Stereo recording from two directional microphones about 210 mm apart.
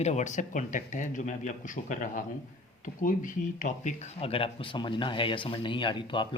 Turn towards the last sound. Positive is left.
turn(degrees=25)  # may be behind; listen again after turning